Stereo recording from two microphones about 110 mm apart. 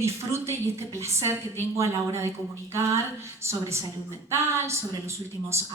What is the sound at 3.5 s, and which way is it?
A woman's voice, 25° right (ahead or behind).